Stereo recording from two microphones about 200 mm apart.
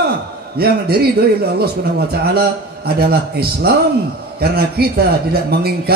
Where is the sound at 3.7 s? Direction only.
50° right (ahead or behind).